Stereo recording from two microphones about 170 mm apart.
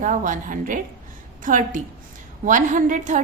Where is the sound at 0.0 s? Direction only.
50° right (ahead or behind).